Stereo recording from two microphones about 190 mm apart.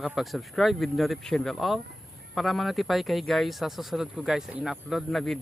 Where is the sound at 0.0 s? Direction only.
5° right (ahead or behind).